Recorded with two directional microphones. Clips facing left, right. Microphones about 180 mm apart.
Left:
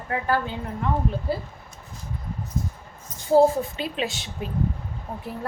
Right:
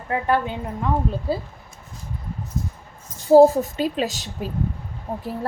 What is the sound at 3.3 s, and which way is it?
A woman's voice, 40° right (ahead or behind).